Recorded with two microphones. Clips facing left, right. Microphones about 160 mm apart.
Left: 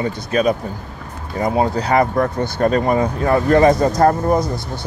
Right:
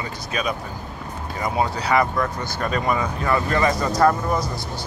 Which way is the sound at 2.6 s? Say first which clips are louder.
Left 7 dB; 35° left (ahead or behind).